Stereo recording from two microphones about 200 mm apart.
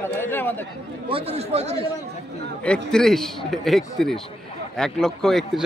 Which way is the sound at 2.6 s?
5° left (ahead or behind).